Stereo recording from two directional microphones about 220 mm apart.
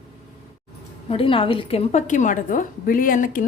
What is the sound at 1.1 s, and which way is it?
A woman's voice, 25° left (ahead or behind).